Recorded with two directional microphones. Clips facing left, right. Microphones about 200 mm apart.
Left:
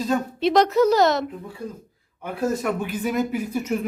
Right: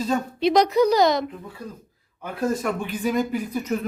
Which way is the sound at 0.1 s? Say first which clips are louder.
Even; centre (ahead or behind).